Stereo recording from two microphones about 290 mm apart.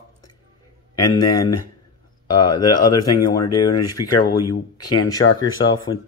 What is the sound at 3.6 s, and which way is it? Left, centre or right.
Speech, left.